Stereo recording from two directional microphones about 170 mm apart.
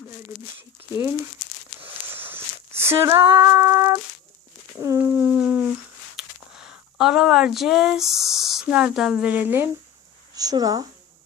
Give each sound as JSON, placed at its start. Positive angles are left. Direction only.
{"t": 0.8, "sound": "speech", "side_deg": -15}
{"t": 1.8, "sound": "a sound", "side_deg": -10}
{"t": 6.1, "sound": "speech", "side_deg": -5}
{"t": 10.3, "sound": "speech", "side_deg": -20}